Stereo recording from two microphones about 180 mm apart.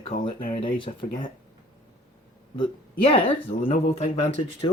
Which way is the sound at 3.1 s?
30° left (ahead or behind).